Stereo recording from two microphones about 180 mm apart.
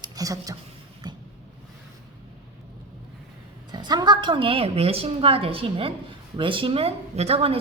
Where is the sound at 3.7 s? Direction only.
25° right (ahead or behind).